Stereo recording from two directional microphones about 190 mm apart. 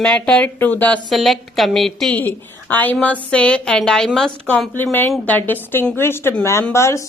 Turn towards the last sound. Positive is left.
turn(degrees=15)  # may be behind; listen again after turning